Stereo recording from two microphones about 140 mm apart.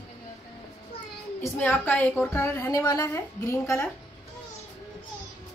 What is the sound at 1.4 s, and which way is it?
A woman's voice, 20° left (ahead or behind).